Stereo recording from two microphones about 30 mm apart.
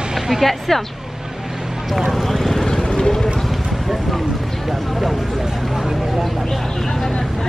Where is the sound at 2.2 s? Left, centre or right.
Centre.